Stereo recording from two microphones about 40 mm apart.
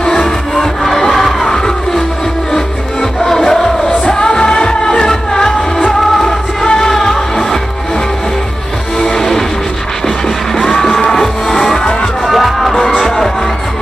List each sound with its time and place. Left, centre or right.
0.0 s music: centre
0.6 s crowd: centre
1.5 s music: centre
9.0 s music: centre
11.8 s music: left
12.3 s music: centre